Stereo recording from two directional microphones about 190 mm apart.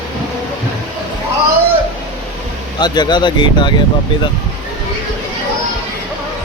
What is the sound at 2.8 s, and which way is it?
Speech, 20° left (ahead or behind).